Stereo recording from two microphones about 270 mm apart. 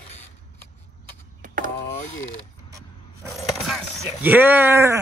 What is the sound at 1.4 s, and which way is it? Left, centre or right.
Vehicle, right.